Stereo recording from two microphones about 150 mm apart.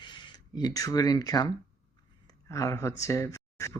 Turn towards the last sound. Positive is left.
turn(degrees=20)  # may be behind; listen again after turning